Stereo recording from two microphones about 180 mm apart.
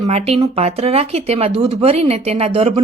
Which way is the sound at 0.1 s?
35° right (ahead or behind).